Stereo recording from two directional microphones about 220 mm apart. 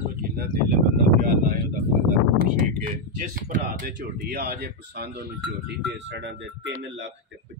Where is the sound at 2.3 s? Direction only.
40° right (ahead or behind).